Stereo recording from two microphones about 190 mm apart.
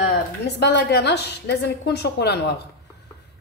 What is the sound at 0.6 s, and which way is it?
A woman's voice, 60° left (ahead or behind).